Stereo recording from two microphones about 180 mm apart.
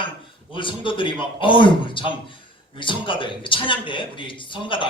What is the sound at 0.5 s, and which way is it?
A man's voice, 30° left (ahead or behind).